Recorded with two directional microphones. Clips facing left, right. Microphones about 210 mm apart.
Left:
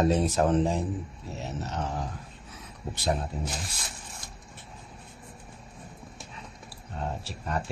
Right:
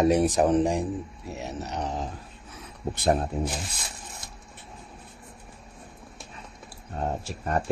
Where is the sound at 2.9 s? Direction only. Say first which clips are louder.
Right 5 dB; 55° right (ahead or behind).